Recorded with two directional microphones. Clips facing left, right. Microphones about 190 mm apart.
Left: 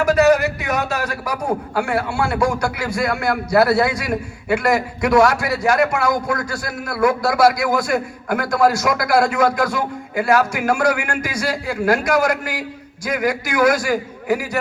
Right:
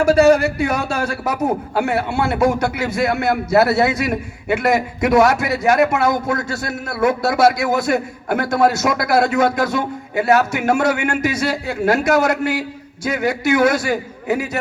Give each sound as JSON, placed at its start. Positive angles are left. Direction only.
{"t": 0.0, "sound": "a man's voice", "side_deg": -30}